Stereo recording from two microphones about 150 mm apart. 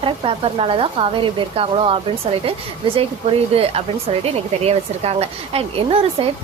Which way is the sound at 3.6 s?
40° right (ahead or behind).